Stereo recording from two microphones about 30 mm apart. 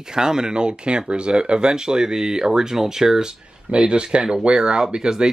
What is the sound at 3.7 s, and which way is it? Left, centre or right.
Speech, right.